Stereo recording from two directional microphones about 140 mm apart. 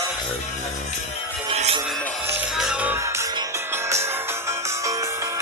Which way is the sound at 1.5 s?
45° right (ahead or behind).